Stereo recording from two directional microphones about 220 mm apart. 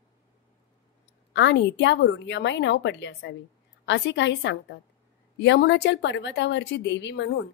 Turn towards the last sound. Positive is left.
turn(degrees=50)  # may be behind; listen again after turning